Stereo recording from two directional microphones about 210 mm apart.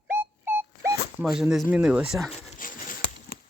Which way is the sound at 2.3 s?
35° left (ahead or behind).